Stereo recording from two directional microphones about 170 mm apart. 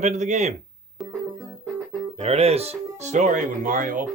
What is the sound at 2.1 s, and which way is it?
Speech, 35° right (ahead or behind).